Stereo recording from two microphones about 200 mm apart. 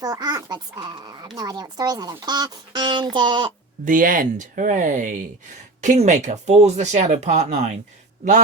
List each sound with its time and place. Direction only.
0.0 s speech: 20° right (ahead or behind)
3.8 s speech: 40° right (ahead or behind)